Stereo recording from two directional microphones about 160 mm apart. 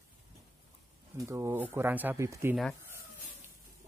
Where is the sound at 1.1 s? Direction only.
20° right (ahead or behind).